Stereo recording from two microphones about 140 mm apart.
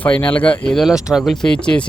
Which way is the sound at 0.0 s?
10° left (ahead or behind).